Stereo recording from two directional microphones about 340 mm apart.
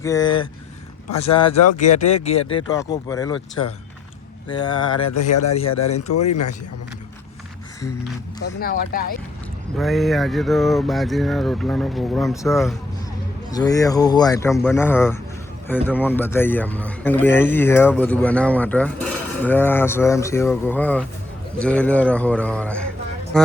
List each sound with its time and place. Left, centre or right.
0.0 s speech: centre
1.8 s speech: centre
4.4 s speech: centre
5.3 s speech: left
8.4 s speech: left
9.7 s speech: centre